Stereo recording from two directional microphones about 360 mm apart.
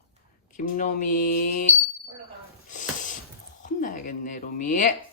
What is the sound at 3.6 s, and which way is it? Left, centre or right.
A woman's voice, left.